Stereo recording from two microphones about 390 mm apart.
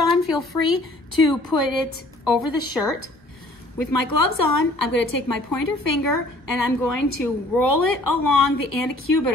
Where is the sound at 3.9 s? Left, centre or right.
Left.